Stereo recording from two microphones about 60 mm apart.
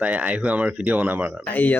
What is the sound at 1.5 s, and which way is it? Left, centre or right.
Speech, left.